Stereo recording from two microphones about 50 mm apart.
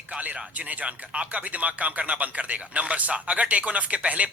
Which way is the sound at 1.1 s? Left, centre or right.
Right.